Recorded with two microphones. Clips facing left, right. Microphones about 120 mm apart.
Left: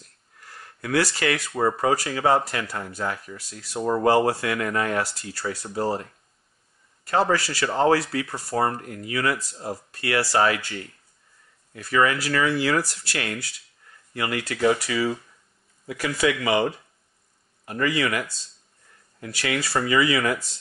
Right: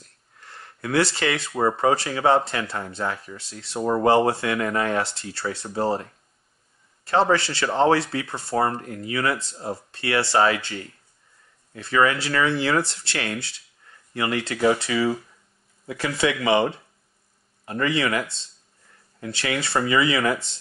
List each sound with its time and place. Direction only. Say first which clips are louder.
0.4 s a sound: right 2 dB; 25° right (ahead or behind)
1.6 s speech: right 2 dB; 25° right (ahead or behind)
7.1 s speech: right 2 dB; 25° right (ahead or behind)
11.7 s speech: right 1 dB; 25° right (ahead or behind)
19.2 s speech: even; 25° right (ahead or behind)